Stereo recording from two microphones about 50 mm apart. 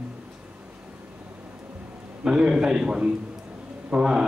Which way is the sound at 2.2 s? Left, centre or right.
Centre.